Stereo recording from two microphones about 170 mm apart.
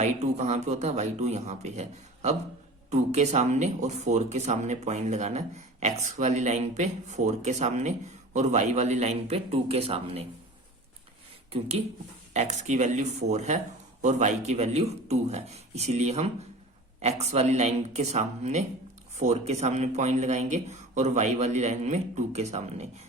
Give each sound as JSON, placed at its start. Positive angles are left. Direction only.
{"t": 0.0, "sound": "speech", "side_deg": -40}
{"t": 12.3, "sound": "speech", "side_deg": -40}